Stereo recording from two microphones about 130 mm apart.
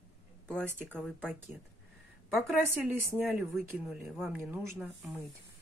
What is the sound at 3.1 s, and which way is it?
Speech, 10° right (ahead or behind).